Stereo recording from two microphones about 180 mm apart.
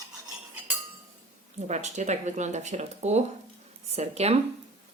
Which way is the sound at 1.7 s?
40° right (ahead or behind).